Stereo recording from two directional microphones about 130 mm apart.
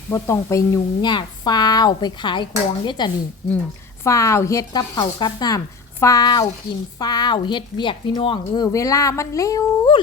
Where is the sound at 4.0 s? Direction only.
25° left (ahead or behind).